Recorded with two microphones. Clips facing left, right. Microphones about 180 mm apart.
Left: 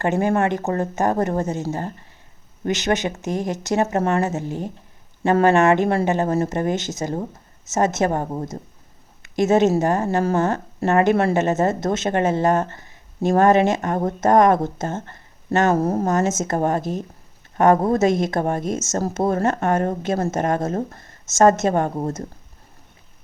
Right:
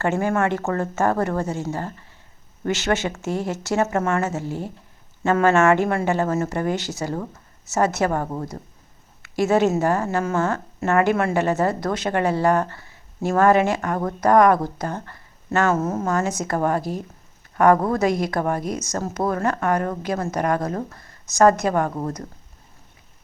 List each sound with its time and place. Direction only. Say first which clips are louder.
0.0 s speech: left 2 dB; 20° left (ahead or behind)
2.6 s speech: left 1 dB; 20° left (ahead or behind)
15.7 s speech: left 3 dB; 35° left (ahead or behind)
16.0 s speech: left 3 dB; 20° left (ahead or behind)